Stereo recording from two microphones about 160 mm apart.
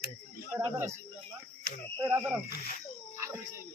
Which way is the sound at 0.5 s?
10° right (ahead or behind).